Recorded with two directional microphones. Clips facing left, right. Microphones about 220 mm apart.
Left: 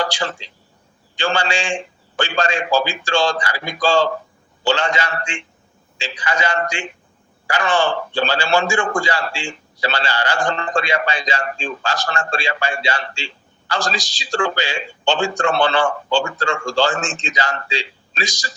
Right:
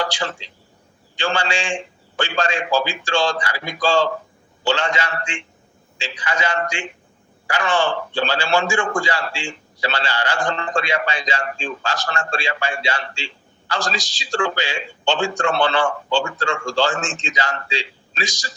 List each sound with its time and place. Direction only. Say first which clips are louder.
0.0 s a man's voice: left 2 dB; 40° left (ahead or behind)